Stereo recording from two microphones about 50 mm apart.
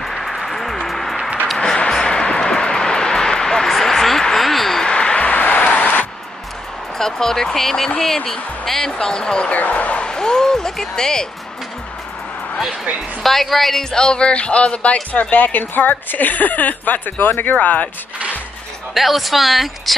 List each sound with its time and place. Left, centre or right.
0.0 s applause: centre
0.8 s a sound: centre
4.8 s a sound: centre
5.3 s a sound: left
7.0 s speech: centre
9.5 s speech: left
10.0 s speech: centre
13.2 s a woman's voice: centre
13.9 s speech: centre
15.3 s a woman's voice: left
17.6 s speech: left
18.9 s a woman's voice: centre